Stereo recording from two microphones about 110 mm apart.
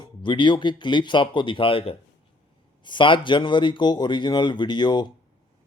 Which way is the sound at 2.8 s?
45° left (ahead or behind).